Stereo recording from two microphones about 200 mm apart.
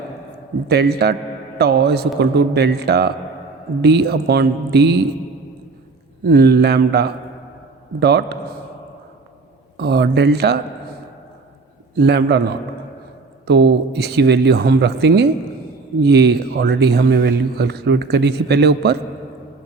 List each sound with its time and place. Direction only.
0.7 s a man's voice: 55° right (ahead or behind)
6.2 s a man's voice: 55° right (ahead or behind)
9.7 s speech: 55° right (ahead or behind)
11.9 s a man's voice: 55° right (ahead or behind)